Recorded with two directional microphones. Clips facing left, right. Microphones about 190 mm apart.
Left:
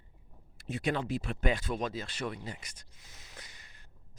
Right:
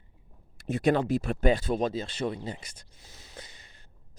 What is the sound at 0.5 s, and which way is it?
Speech, 45° right (ahead or behind).